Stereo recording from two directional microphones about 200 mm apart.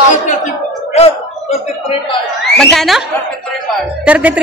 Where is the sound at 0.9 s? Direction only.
30° left (ahead or behind).